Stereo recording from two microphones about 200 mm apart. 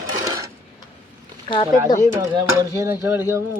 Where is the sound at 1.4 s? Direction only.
25° left (ahead or behind).